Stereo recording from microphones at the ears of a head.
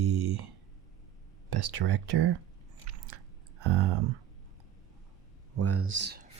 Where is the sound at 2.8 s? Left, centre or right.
Right.